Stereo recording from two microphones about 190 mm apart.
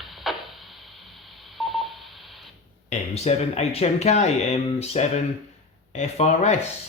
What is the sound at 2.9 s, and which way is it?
Speech, 35° left (ahead or behind).